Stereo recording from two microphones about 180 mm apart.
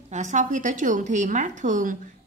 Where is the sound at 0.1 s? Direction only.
40° right (ahead or behind).